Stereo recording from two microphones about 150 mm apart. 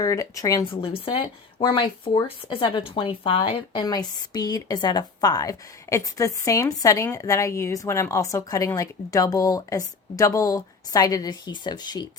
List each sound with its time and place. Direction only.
0.0 s speech: 20° left (ahead or behind)